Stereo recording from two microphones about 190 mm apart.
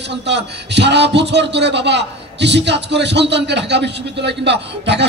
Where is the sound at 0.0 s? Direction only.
65° right (ahead or behind).